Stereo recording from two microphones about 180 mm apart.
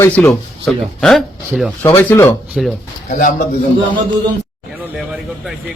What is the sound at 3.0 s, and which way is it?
Speech, 45° left (ahead or behind).